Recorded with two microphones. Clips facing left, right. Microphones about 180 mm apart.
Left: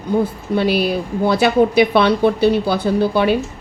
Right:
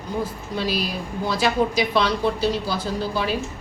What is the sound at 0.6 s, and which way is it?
A woman's voice, 60° left (ahead or behind).